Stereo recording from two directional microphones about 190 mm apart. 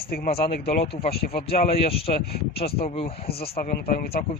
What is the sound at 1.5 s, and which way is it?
Speech, 30° left (ahead or behind).